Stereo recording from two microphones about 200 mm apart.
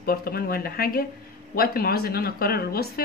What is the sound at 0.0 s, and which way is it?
Speech, 50° left (ahead or behind).